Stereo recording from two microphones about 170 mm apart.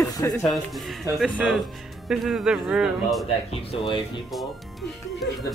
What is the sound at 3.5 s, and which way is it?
Speech, 30° left (ahead or behind).